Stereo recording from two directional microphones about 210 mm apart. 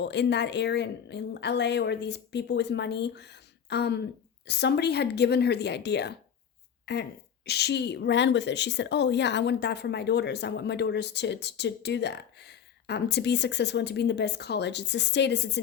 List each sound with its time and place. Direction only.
0.0 s a woman's voice: 55° left (ahead or behind)